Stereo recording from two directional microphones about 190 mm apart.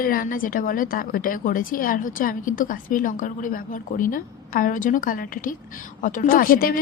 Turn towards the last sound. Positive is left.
turn(degrees=50)  # may be behind; listen again after turning